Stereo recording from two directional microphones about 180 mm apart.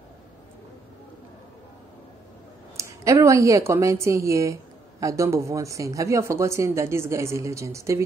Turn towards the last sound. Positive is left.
turn(degrees=-15)  # may be behind; listen again after turning